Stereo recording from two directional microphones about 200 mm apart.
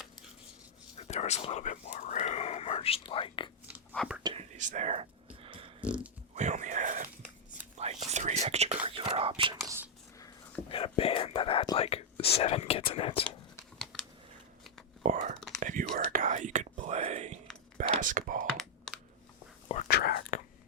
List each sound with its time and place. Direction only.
0.9 s speech: 35° left (ahead or behind)
3.9 s speech: centre (ahead or behind)
4.2 s speech: 25° right (ahead or behind)
4.5 s a sound: 40° right (ahead or behind)
5.8 s a sound: 5° right (ahead or behind)
6.3 s a sound: 35° right (ahead or behind)
7.6 s whispering: 35° right (ahead or behind)
9.6 s a sound: 10° right (ahead or behind)
10.7 s whispering: 25° left (ahead or behind)
12.4 s speech: 30° left (ahead or behind)
15.0 s whispering: 40° right (ahead or behind)
18.4 s computer keyboard: centre (ahead or behind)
19.9 s whispering: 50° left (ahead or behind)